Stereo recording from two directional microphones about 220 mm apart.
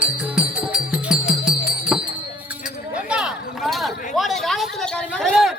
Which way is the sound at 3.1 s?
Centre (ahead or behind).